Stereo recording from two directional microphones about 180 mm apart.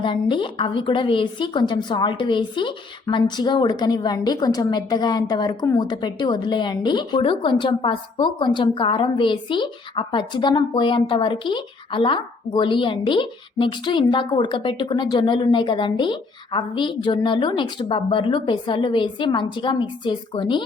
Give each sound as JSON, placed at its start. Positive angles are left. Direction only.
{"t": 0.0, "sound": "a woman's voice", "side_deg": 25}